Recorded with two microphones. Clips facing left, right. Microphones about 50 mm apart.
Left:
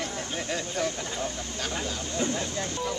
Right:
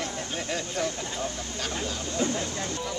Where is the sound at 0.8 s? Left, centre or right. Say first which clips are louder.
Even; left.